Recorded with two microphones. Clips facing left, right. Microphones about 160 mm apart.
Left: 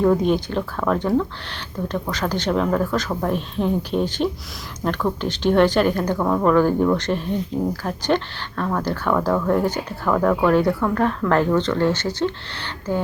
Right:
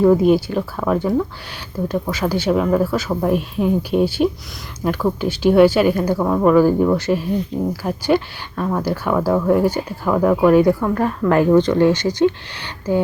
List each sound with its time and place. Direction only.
0.0 s a woman's voice: 5° right (ahead or behind)